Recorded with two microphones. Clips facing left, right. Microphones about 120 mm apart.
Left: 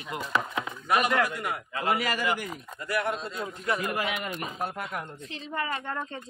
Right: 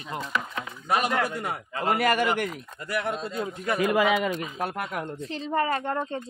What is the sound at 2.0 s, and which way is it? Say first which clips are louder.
Speech: right 7 dB; 55° right (ahead or behind).